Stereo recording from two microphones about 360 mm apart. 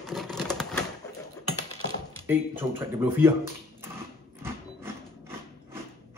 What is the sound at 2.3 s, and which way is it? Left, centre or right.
Speech, centre.